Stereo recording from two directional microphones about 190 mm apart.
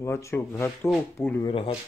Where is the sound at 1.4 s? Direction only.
30° left (ahead or behind).